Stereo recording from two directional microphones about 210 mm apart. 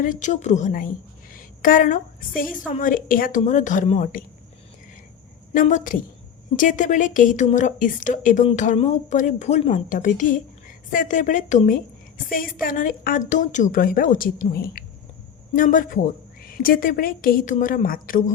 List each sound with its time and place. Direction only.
0.0 s a woman's voice: 35° left (ahead or behind)
5.5 s speech: 40° left (ahead or behind)